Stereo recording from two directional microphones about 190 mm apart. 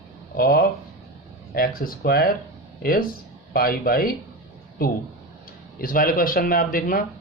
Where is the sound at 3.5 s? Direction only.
50° left (ahead or behind).